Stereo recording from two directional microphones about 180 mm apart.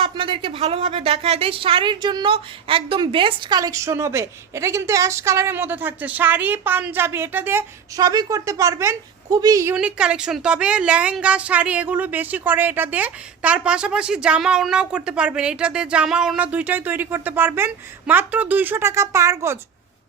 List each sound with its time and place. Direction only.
0.0 s a woman's voice: 30° right (ahead or behind)
9.7 s a woman's voice: 5° right (ahead or behind)